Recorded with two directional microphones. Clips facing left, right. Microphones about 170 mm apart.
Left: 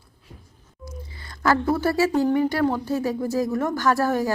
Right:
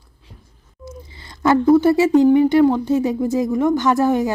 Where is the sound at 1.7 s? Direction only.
20° right (ahead or behind).